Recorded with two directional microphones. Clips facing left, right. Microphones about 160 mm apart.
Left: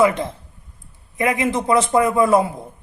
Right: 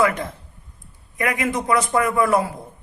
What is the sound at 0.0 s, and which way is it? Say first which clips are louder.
Speech: left 4 dB; 25° left (ahead or behind).